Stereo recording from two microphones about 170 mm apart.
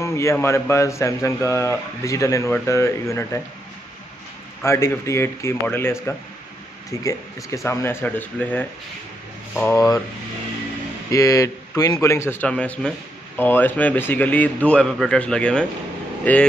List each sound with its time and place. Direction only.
0.0 s speech: 15° left (ahead or behind)
4.6 s speech: 15° left (ahead or behind)
11.1 s speech: 20° left (ahead or behind)